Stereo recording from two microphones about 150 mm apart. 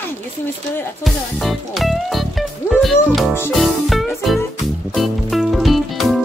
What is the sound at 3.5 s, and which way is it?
Music, centre (ahead or behind).